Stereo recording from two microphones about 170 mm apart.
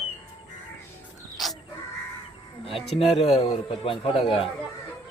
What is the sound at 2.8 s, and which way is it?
A man's voice, 35° left (ahead or behind).